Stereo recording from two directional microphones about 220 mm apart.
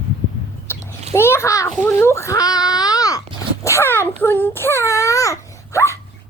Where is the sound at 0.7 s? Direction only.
10° left (ahead or behind).